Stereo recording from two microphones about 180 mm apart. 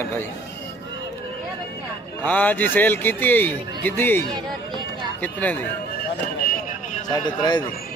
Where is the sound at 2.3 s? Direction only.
10° left (ahead or behind).